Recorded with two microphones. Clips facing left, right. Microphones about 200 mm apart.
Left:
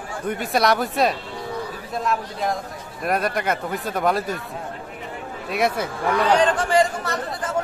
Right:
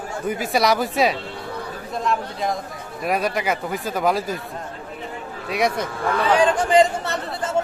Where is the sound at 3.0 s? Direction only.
Centre (ahead or behind).